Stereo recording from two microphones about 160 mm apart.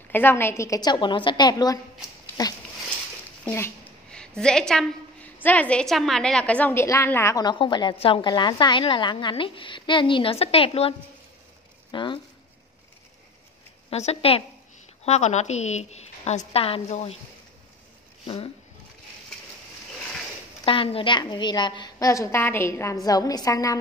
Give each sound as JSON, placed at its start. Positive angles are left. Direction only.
{"t": 0.1, "sound": "a woman's voice", "side_deg": 15}
{"t": 4.1, "sound": "a woman's voice", "side_deg": 5}
{"t": 13.8, "sound": "a woman's voice", "side_deg": 40}
{"t": 18.2, "sound": "speech", "side_deg": 35}
{"t": 20.6, "sound": "a woman's voice", "side_deg": 35}